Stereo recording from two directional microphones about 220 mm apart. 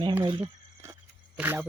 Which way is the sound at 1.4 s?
5° right (ahead or behind).